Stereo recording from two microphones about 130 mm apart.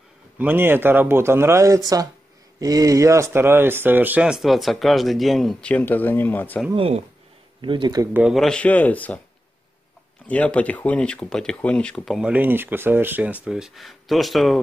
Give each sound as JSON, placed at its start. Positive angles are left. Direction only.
{"t": 0.4, "sound": "speech", "side_deg": -15}
{"t": 6.7, "sound": "speech", "side_deg": -45}
{"t": 8.1, "sound": "speech", "side_deg": -10}
{"t": 8.4, "sound": "speech", "side_deg": 5}
{"t": 10.2, "sound": "speech", "side_deg": 10}